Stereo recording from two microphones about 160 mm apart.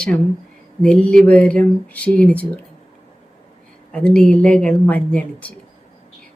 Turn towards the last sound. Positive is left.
turn(degrees=10)  # may be behind; listen again after turning